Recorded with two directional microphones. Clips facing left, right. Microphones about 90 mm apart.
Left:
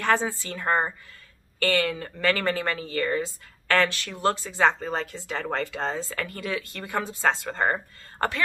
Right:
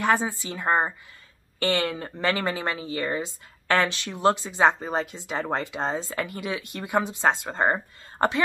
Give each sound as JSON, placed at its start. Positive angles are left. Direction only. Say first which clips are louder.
{"t": 0.0, "sound": "a woman's voice", "louder": "right 1 dB", "side_deg": -15}